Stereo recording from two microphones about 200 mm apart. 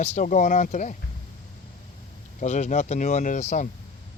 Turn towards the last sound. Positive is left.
turn(degrees=40)  # may be behind; listen again after turning